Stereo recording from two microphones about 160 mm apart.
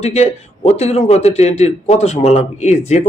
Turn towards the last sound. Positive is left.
turn(degrees=45)  # may be behind; listen again after turning